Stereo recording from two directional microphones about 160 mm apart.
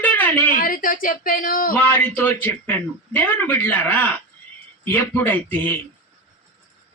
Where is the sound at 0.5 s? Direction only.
60° left (ahead or behind).